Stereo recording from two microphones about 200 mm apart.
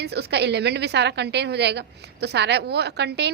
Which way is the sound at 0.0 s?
55° right (ahead or behind).